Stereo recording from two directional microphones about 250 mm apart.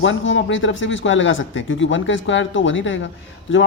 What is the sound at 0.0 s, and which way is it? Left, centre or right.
Speech, left.